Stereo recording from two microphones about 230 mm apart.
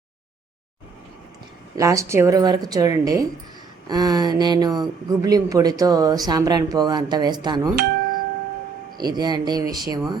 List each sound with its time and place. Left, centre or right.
1.7 s speech: centre
9.0 s speech: centre